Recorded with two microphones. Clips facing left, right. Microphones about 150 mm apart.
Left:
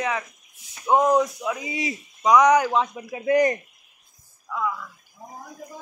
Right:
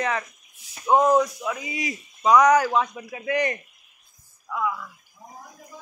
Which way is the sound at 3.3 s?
40° left (ahead or behind).